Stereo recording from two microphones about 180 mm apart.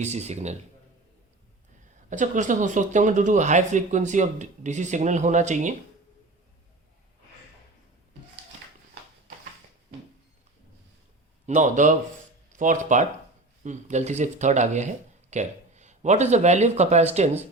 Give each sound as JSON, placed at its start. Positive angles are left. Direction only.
{"t": 0.0, "sound": "speech", "side_deg": -40}
{"t": 2.0, "sound": "speech", "side_deg": -45}
{"t": 11.4, "sound": "speech", "side_deg": -45}